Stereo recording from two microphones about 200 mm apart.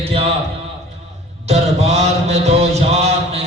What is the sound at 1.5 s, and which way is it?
Mantra, 35° right (ahead or behind).